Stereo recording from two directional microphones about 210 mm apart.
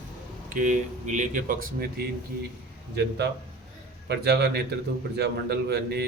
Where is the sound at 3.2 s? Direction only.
50° right (ahead or behind).